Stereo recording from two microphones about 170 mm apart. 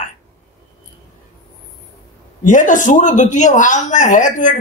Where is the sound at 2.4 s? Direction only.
50° left (ahead or behind).